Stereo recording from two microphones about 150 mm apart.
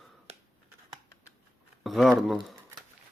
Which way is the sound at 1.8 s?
Centre (ahead or behind).